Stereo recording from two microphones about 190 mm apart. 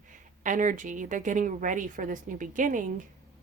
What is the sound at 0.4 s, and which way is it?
Speech, 45° right (ahead or behind).